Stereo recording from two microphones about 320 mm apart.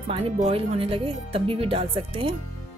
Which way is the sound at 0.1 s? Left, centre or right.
Centre.